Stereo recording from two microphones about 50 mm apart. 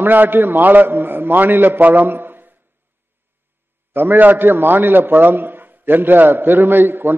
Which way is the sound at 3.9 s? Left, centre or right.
Right.